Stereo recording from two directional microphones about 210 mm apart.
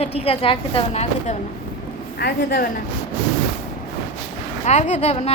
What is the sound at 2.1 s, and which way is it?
Speech, 50° left (ahead or behind).